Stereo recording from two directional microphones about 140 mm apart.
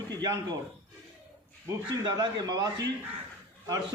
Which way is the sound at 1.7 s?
30° right (ahead or behind).